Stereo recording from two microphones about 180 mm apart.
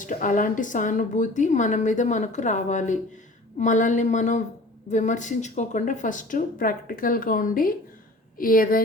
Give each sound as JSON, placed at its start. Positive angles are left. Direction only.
{"t": 0.0, "sound": "a woman's voice", "side_deg": 45}